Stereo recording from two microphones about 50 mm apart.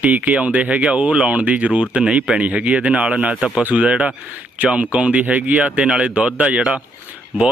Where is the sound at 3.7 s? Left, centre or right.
Right.